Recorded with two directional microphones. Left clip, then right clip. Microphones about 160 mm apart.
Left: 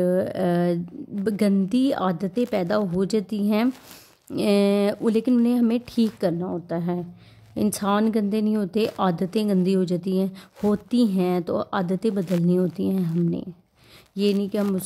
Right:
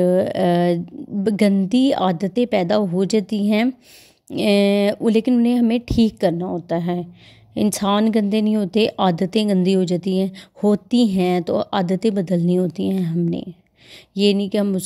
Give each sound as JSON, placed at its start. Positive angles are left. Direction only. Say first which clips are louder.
{"t": 0.0, "sound": "a woman's voice", "louder": "right 5 dB", "side_deg": -20}